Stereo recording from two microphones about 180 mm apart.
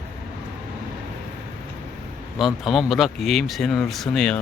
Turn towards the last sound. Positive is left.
turn(degrees=5)  # may be behind; listen again after turning